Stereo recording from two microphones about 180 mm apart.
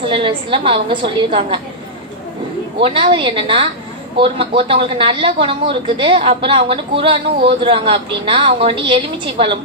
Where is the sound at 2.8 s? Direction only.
30° right (ahead or behind).